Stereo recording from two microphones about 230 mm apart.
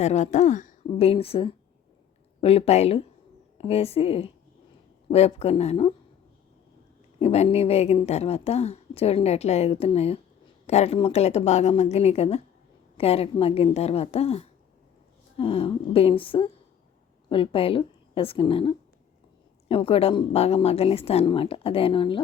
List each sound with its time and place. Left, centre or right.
0.0 s a woman's voice: left
7.2 s a woman's voice: left